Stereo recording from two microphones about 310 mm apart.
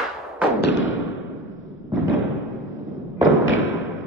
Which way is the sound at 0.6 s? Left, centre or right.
Left.